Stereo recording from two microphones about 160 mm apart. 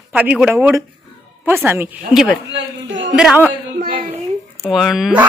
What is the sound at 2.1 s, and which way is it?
A woman's voice, 5° right (ahead or behind).